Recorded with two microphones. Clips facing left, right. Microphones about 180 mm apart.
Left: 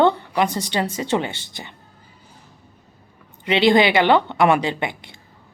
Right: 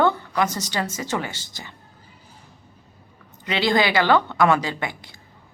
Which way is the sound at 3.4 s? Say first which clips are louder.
Left 5 dB; 20° left (ahead or behind).